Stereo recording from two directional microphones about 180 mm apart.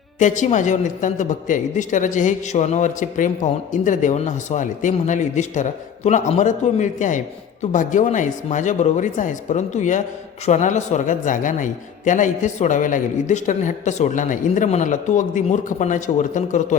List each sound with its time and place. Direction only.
0.2 s a man's voice: 45° left (ahead or behind)